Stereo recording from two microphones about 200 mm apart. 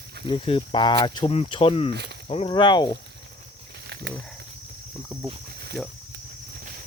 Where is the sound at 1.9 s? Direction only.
55° right (ahead or behind).